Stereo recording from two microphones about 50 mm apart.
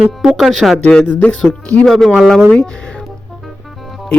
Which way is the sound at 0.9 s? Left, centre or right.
Left.